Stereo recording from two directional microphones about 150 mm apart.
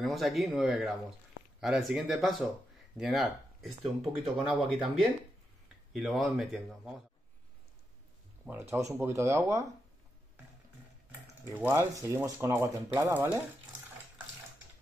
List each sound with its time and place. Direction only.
0.0 s speech: centre (ahead or behind)
8.5 s speech: 15° right (ahead or behind)
11.5 s speech: 10° right (ahead or behind)